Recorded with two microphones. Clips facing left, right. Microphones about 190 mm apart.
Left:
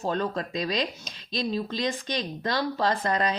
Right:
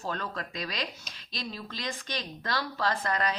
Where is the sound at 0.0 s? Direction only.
25° left (ahead or behind).